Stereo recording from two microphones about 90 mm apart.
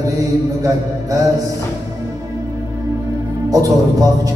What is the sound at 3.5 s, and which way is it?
Speech, 40° right (ahead or behind).